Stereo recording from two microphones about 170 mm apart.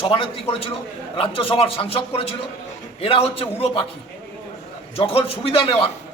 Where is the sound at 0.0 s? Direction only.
30° left (ahead or behind).